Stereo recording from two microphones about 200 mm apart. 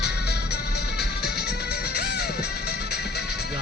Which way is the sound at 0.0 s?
55° left (ahead or behind).